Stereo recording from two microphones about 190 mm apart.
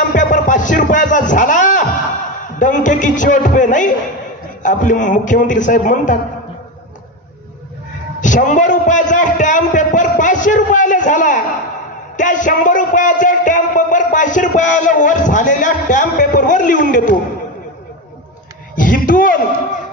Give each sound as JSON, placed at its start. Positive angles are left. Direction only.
{"t": 0.1, "sound": "music", "side_deg": 40}
{"t": 2.4, "sound": "a man's voice", "side_deg": 40}
{"t": 8.2, "sound": "a man's voice", "side_deg": 40}
{"t": 18.8, "sound": "a sound", "side_deg": 45}